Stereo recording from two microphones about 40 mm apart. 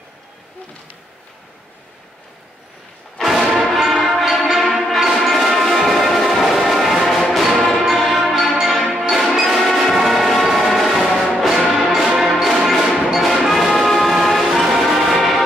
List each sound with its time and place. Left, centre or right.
3.6 s music: centre